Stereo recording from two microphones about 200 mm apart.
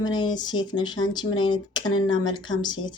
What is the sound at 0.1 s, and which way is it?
Speech, 20° left (ahead or behind).